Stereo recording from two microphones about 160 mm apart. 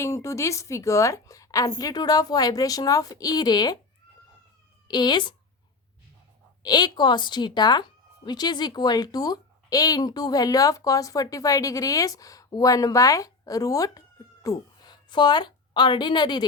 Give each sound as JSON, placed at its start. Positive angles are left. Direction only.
{"t": 0.0, "sound": "speech", "side_deg": 20}
{"t": 4.9, "sound": "speech", "side_deg": 25}
{"t": 6.6, "sound": "a woman's voice", "side_deg": 25}